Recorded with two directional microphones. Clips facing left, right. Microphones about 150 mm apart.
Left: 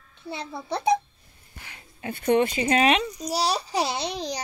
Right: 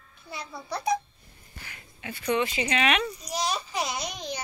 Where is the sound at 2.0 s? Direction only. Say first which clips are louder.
Left 6 dB; 50° left (ahead or behind); by 4.4 s 35° left (ahead or behind).